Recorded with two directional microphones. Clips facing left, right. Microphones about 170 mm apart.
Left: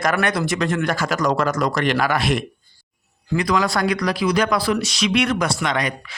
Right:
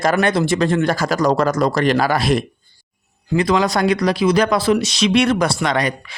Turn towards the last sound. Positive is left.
turn(degrees=-35)  # may be behind; listen again after turning